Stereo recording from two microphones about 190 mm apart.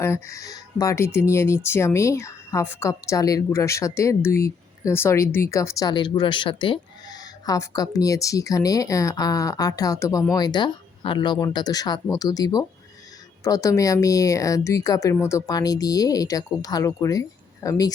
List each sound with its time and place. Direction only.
0.0 s speech: 15° left (ahead or behind)